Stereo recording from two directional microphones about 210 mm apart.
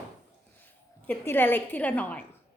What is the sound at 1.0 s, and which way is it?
A woman's voice, 10° left (ahead or behind).